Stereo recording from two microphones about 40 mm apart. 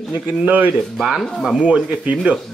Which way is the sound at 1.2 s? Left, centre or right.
Centre.